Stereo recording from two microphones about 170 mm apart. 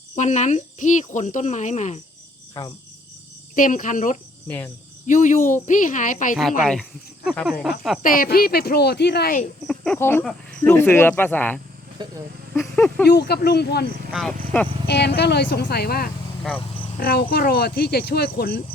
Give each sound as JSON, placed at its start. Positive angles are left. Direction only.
{"t": 0.2, "sound": "speech", "side_deg": 45}
{"t": 3.5, "sound": "speech", "side_deg": 50}
{"t": 4.4, "sound": "speech", "side_deg": 10}
{"t": 5.0, "sound": "speech", "side_deg": 50}
{"t": 6.6, "sound": "speech", "side_deg": 0}
{"t": 8.0, "sound": "speech", "side_deg": 55}
{"t": 9.6, "sound": "speech", "side_deg": 5}
{"t": 10.0, "sound": "speech", "side_deg": 15}
{"t": 12.0, "sound": "speech", "side_deg": -25}
{"t": 12.5, "sound": "speech", "side_deg": 5}
{"t": 13.1, "sound": "speech", "side_deg": 75}
{"t": 14.1, "sound": "speech", "side_deg": 0}
{"t": 14.8, "sound": "speech", "side_deg": 80}